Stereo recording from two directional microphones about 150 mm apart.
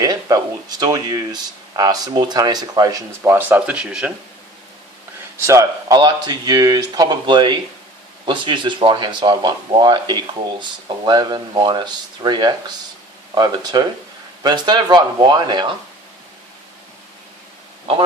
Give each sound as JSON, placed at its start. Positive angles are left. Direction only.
{"t": 0.0, "sound": "speech", "side_deg": -25}
{"t": 5.5, "sound": "speech", "side_deg": -25}